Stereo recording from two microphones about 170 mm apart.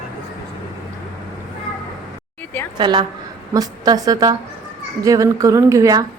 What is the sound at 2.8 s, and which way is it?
A woman's voice, 30° right (ahead or behind).